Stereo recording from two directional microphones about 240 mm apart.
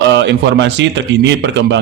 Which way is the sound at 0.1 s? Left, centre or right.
Right.